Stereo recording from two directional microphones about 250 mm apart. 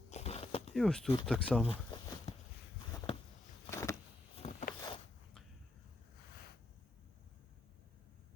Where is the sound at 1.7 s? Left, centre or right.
Centre.